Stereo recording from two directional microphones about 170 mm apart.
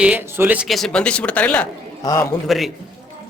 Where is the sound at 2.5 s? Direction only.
Centre (ahead or behind).